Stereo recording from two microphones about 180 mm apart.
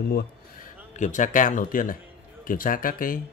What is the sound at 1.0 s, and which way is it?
Speech, 45° left (ahead or behind).